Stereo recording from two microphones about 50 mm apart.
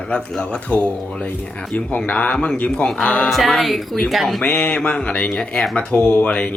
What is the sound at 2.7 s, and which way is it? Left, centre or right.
Speech, centre.